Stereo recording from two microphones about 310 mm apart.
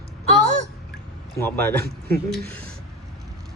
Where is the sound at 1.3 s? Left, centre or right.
Centre.